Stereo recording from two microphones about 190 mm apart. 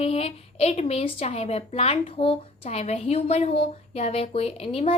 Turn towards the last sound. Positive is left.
turn(degrees=30)  # may be behind; listen again after turning